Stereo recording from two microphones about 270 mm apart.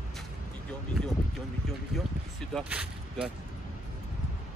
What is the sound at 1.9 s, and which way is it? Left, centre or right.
Speech, centre.